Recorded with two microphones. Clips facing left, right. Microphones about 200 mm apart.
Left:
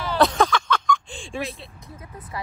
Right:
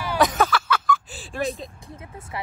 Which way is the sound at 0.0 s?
10° right (ahead or behind).